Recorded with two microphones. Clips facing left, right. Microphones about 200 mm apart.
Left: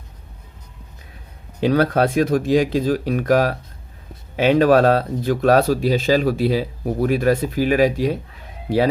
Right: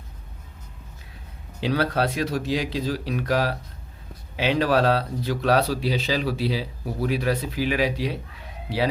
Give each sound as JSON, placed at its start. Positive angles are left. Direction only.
{"t": 1.6, "sound": "speech", "side_deg": 50}